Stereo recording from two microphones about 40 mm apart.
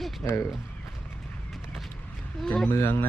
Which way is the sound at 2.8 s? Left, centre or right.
Left.